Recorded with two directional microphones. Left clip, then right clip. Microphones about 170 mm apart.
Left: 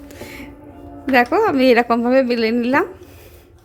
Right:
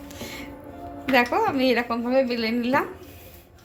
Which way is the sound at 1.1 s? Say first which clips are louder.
Left 6 dB; 55° left (ahead or behind).